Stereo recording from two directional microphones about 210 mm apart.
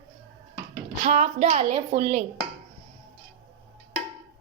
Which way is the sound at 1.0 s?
35° right (ahead or behind).